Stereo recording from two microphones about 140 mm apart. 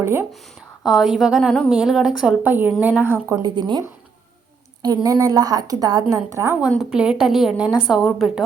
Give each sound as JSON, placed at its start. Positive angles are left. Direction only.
{"t": 0.0, "sound": "a woman's voice", "side_deg": -15}
{"t": 0.8, "sound": "a woman's voice", "side_deg": 0}
{"t": 3.5, "sound": "speech", "side_deg": -30}
{"t": 5.0, "sound": "a woman's voice", "side_deg": -25}